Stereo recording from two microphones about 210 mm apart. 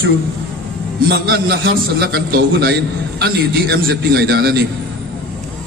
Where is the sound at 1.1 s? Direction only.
45° right (ahead or behind).